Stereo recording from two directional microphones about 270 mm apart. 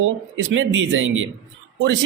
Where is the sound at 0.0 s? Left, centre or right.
Right.